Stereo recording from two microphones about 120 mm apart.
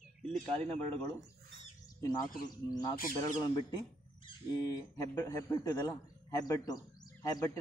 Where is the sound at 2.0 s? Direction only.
35° left (ahead or behind).